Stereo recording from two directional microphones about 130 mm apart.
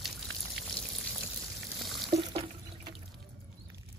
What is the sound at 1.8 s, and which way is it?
Frying, centre (ahead or behind).